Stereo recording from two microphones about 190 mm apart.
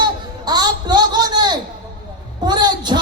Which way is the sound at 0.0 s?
20° right (ahead or behind).